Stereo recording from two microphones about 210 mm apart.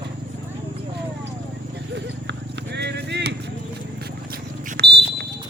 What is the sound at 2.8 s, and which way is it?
Horse, 55° right (ahead or behind).